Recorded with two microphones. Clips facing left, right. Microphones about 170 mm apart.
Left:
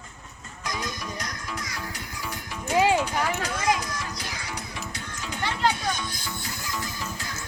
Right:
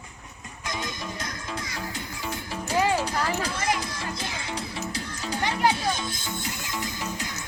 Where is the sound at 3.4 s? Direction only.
30° right (ahead or behind).